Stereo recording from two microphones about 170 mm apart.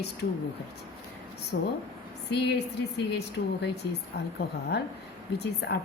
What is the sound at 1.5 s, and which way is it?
Speech, 80° left.